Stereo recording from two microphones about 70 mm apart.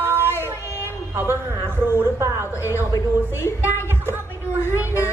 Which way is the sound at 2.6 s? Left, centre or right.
Left.